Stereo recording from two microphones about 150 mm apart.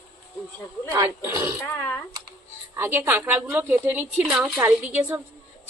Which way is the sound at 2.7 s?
15° right (ahead or behind).